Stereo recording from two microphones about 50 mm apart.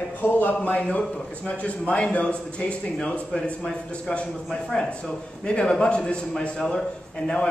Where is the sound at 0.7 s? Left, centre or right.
Left.